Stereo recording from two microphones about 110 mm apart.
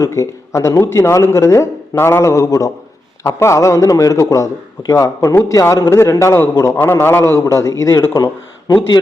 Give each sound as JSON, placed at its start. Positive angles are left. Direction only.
{"t": 0.0, "sound": "a man's voice", "side_deg": 30}
{"t": 8.1, "sound": "speech", "side_deg": 35}